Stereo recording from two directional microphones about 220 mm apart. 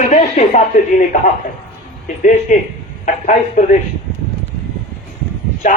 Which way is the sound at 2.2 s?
35° left (ahead or behind).